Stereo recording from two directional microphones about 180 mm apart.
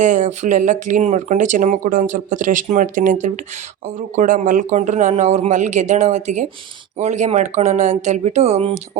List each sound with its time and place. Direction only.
0.0 s speech: 40° right (ahead or behind)